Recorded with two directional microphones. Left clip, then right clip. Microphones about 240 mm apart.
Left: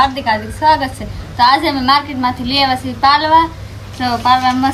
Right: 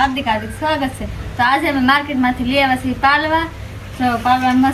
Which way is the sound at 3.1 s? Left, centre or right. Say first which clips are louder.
Left 5 dB; left.